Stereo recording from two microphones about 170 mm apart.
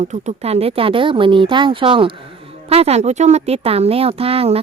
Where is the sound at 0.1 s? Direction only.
40° right (ahead or behind).